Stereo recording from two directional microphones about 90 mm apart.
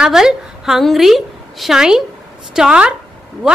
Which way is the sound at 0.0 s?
5° right (ahead or behind).